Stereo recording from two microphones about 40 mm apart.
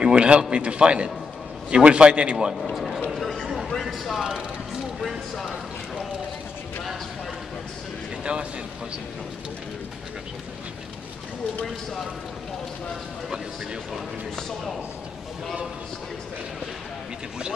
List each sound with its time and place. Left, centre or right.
0.0 s a man's voice: right
3.5 s a sound: centre
4.2 s speech: centre
8.2 s a man's voice: right